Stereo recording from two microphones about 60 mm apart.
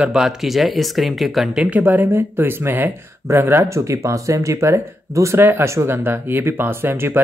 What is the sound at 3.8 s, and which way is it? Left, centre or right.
Speech, right.